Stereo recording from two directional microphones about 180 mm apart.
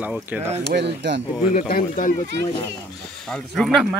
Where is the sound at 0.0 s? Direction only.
10° right (ahead or behind).